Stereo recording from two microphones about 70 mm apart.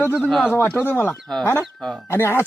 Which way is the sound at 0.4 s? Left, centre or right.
Left.